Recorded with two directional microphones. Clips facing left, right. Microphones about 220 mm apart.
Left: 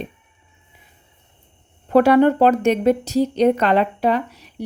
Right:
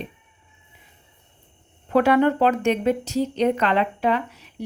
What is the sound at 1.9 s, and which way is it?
Speech, 35° left (ahead or behind).